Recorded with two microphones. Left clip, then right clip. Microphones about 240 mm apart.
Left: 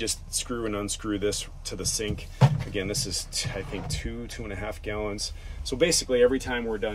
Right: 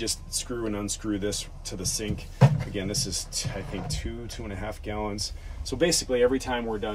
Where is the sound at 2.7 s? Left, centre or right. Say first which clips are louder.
Left 1 dB; left.